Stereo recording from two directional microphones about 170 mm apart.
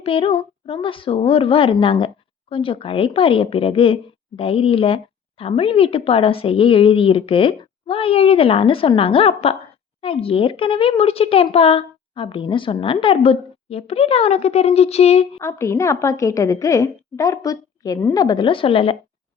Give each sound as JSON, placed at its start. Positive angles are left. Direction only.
{"t": 0.0, "sound": "speech", "side_deg": 35}
{"t": 15.4, "sound": "a woman's voice", "side_deg": 15}